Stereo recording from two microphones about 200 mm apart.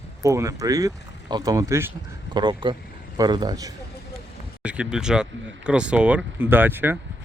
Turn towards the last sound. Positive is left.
turn(degrees=-10)  # may be behind; listen again after turning